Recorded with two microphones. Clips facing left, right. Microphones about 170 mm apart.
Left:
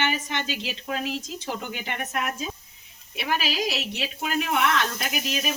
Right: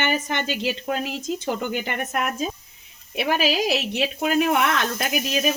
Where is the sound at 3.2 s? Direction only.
50° right (ahead or behind).